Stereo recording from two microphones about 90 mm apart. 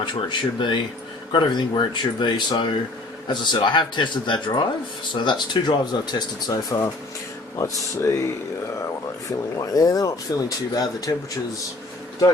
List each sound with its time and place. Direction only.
0.0 s speech: 60° left (ahead or behind); by 8.3 s 35° left (ahead or behind)
9.6 s speech: 40° left (ahead or behind)